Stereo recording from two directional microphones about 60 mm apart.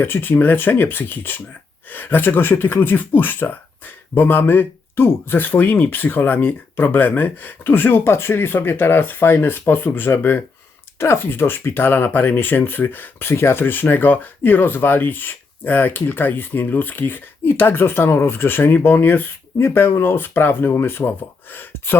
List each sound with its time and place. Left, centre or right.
0.0 s speech: left
10.9 s speech: left